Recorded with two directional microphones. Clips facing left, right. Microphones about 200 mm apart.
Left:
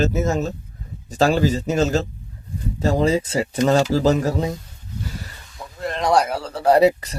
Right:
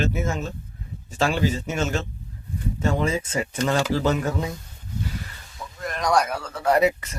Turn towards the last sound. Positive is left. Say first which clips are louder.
# left 5 dB
turn(degrees=35)  # may be behind; listen again after turning